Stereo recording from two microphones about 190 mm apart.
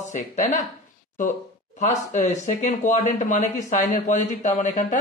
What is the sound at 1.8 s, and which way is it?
Speech, 35° left (ahead or behind).